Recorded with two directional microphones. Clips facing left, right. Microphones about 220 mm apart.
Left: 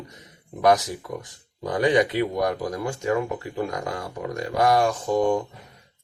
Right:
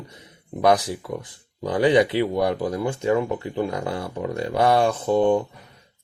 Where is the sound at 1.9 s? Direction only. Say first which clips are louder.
Right 2 dB; 20° right (ahead or behind).